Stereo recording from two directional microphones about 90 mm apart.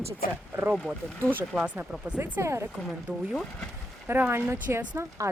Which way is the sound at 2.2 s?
30° right (ahead or behind).